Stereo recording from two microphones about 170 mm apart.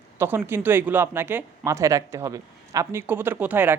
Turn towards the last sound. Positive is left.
turn(degrees=-10)  # may be behind; listen again after turning